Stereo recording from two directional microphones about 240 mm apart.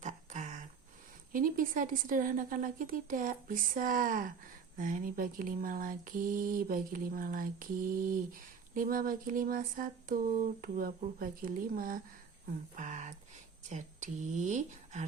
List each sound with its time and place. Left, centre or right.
0.0 s a sound: right
1.3 s mantra: right
12.7 s speech: right